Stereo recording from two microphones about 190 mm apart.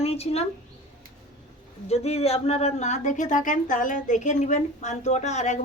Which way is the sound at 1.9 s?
35° left (ahead or behind).